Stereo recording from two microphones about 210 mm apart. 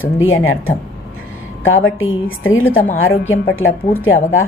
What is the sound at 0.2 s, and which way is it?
A woman's voice, 75° left (ahead or behind).